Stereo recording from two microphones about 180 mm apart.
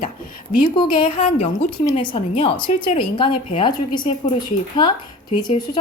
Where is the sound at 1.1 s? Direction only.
40° left (ahead or behind).